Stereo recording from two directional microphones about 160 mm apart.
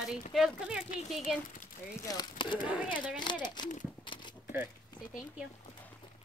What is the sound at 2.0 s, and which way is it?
A child's voice, 25° left (ahead or behind).